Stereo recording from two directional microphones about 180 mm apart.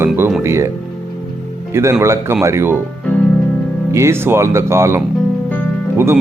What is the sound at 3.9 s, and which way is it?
Speech, 15° right (ahead or behind).